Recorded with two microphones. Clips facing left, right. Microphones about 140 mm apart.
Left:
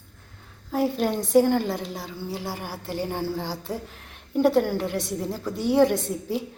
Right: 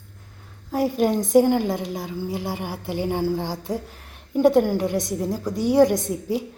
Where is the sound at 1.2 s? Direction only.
15° right (ahead or behind).